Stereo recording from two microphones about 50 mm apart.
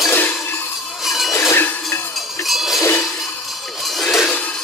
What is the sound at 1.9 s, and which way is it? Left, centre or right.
Cowbell, left.